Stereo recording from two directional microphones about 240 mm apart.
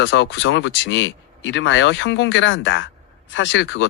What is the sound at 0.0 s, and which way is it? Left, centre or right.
Speech, left.